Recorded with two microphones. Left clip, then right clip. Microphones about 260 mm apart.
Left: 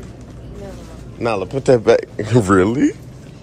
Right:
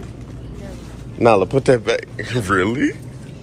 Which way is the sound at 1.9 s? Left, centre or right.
Left.